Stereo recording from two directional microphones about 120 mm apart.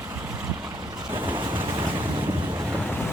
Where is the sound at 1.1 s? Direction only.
20° right (ahead or behind).